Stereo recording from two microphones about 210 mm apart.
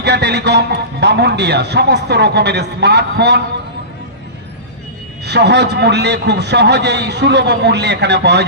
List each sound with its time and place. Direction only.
0.0 s a man's voice: 55° right (ahead or behind)
5.2 s a man's voice: 55° right (ahead or behind)